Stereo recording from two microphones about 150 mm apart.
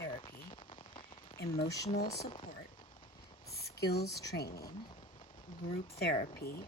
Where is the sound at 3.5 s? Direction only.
90° left.